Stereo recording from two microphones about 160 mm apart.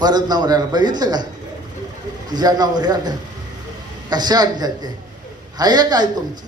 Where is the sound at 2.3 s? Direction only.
25° right (ahead or behind).